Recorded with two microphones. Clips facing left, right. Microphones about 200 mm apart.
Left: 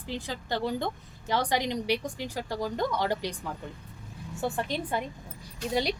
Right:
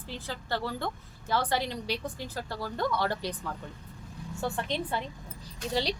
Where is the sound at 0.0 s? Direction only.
15° left (ahead or behind).